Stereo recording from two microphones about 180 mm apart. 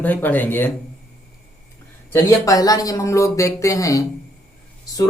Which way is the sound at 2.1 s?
20° left (ahead or behind).